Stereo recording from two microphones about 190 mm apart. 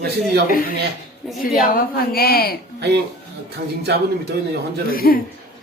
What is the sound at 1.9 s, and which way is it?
Speech, 55° left (ahead or behind).